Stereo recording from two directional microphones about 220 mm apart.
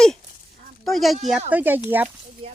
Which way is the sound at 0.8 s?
Centre (ahead or behind).